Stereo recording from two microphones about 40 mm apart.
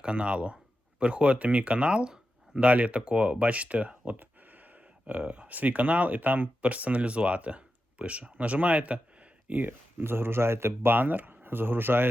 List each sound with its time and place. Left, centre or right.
0.0 s speech: right
9.5 s speech: right
10.0 s speech: right
10.9 s speech: right